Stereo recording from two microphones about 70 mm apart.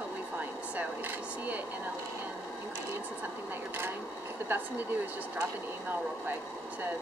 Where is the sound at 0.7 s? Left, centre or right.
Right.